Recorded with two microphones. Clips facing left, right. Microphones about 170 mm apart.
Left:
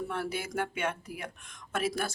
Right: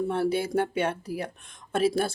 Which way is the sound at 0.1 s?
30° right (ahead or behind).